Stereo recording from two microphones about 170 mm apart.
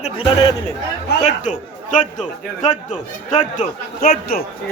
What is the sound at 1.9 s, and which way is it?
A man's voice, 45° left (ahead or behind).